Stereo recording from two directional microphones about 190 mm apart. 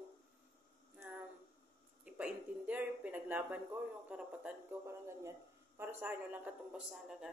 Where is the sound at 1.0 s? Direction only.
10° right (ahead or behind).